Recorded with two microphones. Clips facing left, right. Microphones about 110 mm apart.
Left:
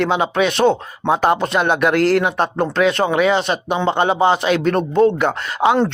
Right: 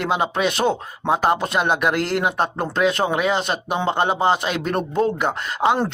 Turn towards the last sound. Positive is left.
turn(degrees=-5)  # may be behind; listen again after turning